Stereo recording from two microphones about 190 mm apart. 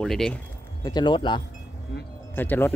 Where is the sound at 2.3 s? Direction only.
10° left (ahead or behind).